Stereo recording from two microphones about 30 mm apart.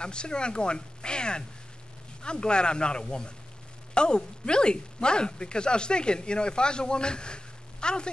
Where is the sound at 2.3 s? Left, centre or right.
Left.